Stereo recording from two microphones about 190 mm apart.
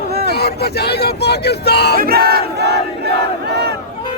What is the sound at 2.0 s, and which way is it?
Battle cry, 50° right (ahead or behind).